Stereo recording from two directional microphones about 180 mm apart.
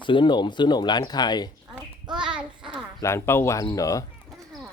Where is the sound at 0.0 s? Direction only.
25° left (ahead or behind).